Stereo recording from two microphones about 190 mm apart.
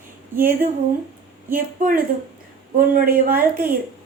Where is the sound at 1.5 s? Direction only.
50° right (ahead or behind).